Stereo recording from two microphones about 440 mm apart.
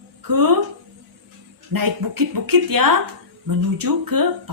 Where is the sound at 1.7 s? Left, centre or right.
Right.